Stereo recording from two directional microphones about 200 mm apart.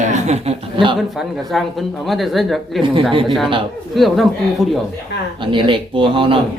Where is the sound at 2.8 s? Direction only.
25° right (ahead or behind).